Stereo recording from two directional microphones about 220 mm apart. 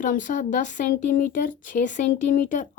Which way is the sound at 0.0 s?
35° left (ahead or behind).